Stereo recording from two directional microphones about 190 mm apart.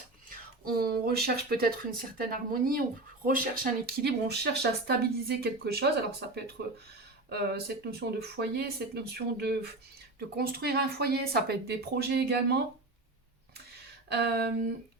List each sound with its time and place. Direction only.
0.3 s speech: 50° right (ahead or behind)
14.1 s speech: 60° right (ahead or behind)